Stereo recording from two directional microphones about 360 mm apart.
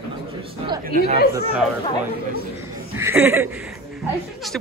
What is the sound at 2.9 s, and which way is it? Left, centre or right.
A man's voice, centre.